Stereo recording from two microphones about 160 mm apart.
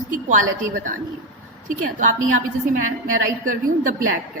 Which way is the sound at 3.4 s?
60° right (ahead or behind).